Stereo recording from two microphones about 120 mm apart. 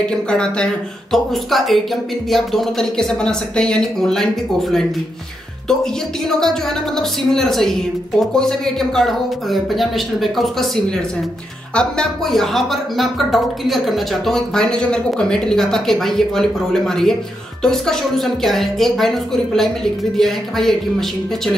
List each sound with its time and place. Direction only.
0.3 s speech: 10° left (ahead or behind)
6.2 s speech: 5° left (ahead or behind)